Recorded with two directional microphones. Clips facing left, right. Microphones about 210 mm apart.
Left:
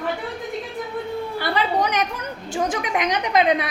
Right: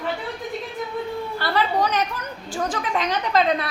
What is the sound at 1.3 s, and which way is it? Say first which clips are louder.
A woman's voice: even; 15° left (ahead or behind).